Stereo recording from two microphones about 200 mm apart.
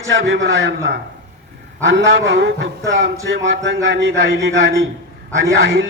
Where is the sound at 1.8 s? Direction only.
65° right (ahead or behind).